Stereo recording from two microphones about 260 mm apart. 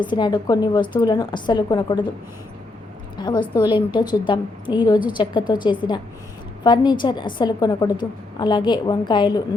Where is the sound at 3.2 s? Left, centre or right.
Centre.